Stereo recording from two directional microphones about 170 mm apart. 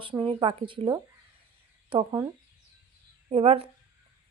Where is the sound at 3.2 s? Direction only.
35° right (ahead or behind).